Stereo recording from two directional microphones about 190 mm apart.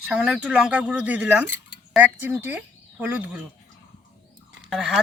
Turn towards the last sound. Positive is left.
turn(degrees=0)  # may be behind; listen again after turning